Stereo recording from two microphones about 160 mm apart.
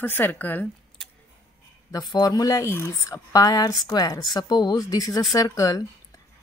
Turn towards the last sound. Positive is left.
turn(degrees=20)  # may be behind; listen again after turning